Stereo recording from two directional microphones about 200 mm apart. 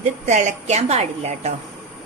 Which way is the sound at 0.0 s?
35° right (ahead or behind).